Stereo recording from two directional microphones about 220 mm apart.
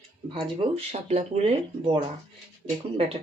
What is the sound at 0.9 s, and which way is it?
Speech, 30° right (ahead or behind).